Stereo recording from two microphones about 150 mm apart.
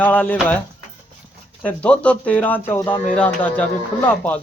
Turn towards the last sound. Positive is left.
turn(degrees=10)  # may be behind; listen again after turning